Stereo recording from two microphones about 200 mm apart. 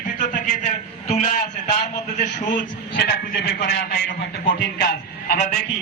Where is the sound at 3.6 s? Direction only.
55° left (ahead or behind).